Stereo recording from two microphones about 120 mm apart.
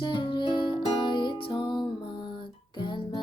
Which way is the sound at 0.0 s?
45° left (ahead or behind).